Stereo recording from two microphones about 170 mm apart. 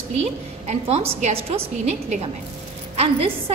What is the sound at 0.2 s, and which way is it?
A woman's voice, 40° right (ahead or behind).